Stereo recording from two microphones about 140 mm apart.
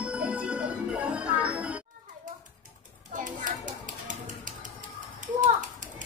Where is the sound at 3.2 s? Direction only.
65° right (ahead or behind).